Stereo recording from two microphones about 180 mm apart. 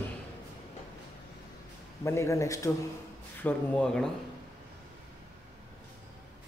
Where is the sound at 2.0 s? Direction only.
15° left (ahead or behind).